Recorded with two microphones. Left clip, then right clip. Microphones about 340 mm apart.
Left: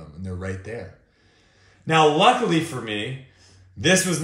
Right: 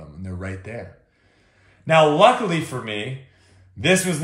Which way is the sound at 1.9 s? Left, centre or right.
Centre.